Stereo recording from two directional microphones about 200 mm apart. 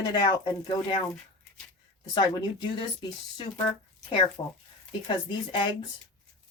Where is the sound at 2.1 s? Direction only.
20° left (ahead or behind).